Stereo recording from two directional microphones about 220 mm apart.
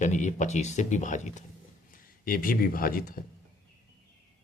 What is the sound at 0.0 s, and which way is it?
Speech, 35° left (ahead or behind).